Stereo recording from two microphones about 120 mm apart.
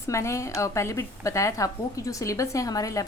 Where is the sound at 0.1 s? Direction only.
25° left (ahead or behind).